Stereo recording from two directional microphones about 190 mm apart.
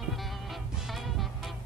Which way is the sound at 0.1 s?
Centre (ahead or behind).